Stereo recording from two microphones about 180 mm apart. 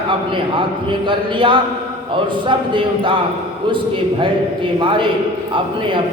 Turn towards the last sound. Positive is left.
turn(degrees=-25)  # may be behind; listen again after turning